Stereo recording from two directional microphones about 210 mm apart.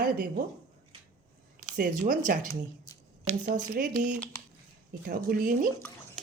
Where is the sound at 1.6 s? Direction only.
35° right (ahead or behind).